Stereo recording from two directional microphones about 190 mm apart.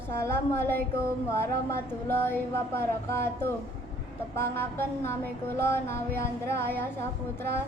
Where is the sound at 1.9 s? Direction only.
10° left (ahead or behind).